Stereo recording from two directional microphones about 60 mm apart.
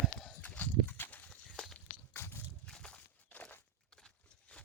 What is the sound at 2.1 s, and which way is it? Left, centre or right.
Livestock, left.